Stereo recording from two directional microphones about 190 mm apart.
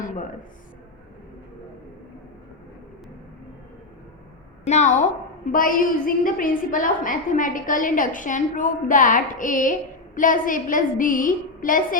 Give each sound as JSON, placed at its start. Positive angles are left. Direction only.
{"t": 4.6, "sound": "a woman's voice", "side_deg": 40}